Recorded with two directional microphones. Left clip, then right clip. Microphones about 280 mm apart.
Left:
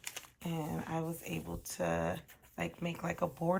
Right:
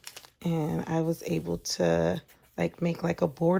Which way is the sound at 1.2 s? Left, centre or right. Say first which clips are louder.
Right 11 dB; centre.